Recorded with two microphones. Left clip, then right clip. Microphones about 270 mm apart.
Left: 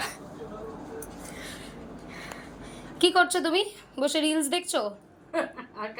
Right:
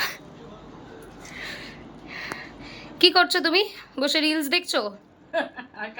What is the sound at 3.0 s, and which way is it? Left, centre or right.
A woman's voice, centre.